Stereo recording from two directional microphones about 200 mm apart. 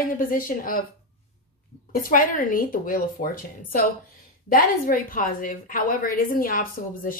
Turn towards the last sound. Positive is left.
turn(degrees=45)  # may be behind; listen again after turning